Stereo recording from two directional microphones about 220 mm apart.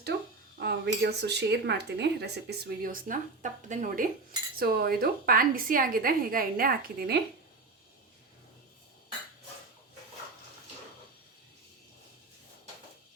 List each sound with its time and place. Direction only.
0.6 s speech: 50° right (ahead or behind)